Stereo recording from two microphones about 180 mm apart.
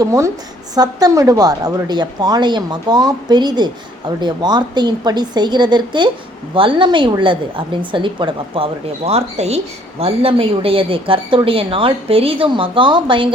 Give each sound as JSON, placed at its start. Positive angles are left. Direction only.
{"t": 0.0, "sound": "a woman's voice", "side_deg": -15}